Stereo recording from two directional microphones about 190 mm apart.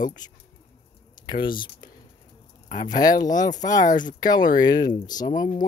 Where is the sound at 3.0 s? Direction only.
20° left (ahead or behind).